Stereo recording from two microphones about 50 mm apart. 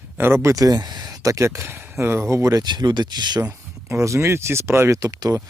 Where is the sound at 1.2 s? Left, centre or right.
Right.